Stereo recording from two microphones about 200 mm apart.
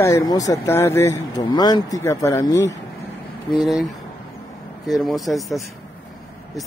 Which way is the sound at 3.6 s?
Centre (ahead or behind).